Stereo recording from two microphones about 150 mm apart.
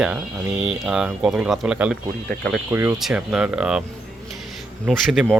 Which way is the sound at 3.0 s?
5° right (ahead or behind).